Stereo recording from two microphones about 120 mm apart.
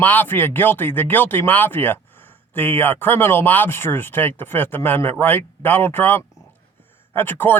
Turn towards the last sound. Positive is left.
turn(degrees=15)  # may be behind; listen again after turning